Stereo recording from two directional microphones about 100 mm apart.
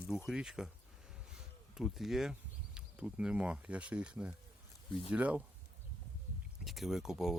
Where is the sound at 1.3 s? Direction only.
5° right (ahead or behind).